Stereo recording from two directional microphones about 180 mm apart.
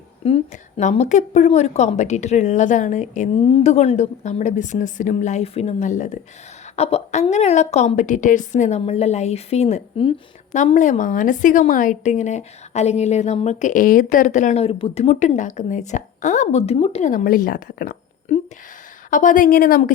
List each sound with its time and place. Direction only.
0.3 s a woman's voice: 40° left (ahead or behind); by 17.9 s 55° left (ahead or behind)
18.3 s a sound: 40° left (ahead or behind)
19.1 s a woman's voice: 45° left (ahead or behind)